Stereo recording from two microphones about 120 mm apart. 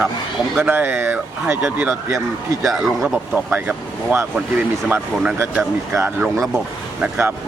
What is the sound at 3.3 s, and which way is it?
Speech, 10° right (ahead or behind).